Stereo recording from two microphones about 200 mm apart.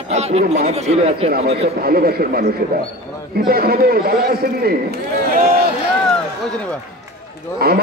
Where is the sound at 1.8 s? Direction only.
50° right (ahead or behind).